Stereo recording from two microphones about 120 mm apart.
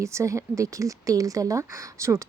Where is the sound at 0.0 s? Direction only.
25° right (ahead or behind).